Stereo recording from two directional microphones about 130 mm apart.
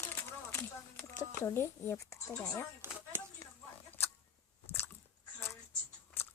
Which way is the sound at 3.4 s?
20° left (ahead or behind).